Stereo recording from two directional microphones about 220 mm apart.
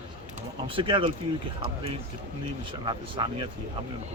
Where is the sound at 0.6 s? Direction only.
25° right (ahead or behind).